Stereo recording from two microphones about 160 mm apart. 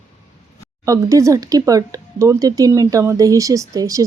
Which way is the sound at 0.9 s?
20° right (ahead or behind).